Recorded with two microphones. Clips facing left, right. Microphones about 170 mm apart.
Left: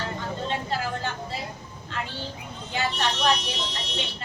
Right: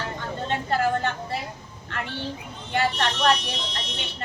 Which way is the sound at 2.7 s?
55° right (ahead or behind).